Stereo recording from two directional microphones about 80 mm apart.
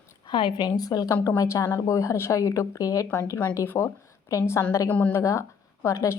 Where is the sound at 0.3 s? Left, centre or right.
Left.